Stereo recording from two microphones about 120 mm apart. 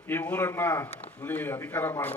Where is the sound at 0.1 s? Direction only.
15° left (ahead or behind).